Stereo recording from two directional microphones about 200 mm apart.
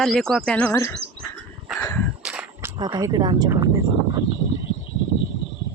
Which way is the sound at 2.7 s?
20° right (ahead or behind).